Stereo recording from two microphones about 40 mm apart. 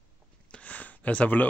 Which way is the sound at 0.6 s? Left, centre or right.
Left.